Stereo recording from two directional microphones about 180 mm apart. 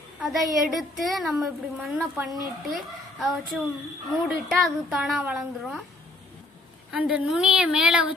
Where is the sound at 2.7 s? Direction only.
Centre (ahead or behind).